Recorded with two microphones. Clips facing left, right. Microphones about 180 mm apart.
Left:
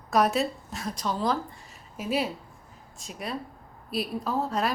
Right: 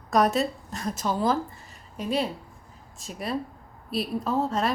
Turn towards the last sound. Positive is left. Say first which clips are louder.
# right 2 dB
turn(degrees=0)  # may be behind; listen again after turning